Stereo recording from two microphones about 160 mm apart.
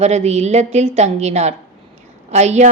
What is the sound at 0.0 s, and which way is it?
A woman's voice, 45° right (ahead or behind).